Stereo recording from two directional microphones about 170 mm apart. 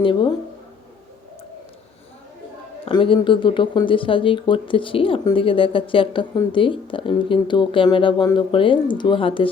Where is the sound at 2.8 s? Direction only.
30° left (ahead or behind).